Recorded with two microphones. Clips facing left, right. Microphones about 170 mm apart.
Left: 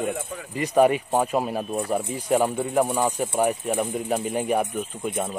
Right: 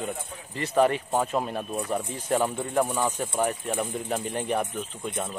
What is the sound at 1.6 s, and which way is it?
Speech, 30° left (ahead or behind).